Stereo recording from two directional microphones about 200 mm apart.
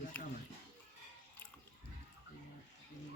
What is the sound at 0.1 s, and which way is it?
Music, 5° left (ahead or behind).